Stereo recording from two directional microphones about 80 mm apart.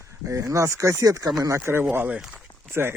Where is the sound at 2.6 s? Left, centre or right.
Right.